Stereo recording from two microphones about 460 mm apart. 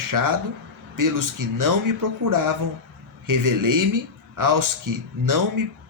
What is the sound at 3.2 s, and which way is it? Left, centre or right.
Speech, right.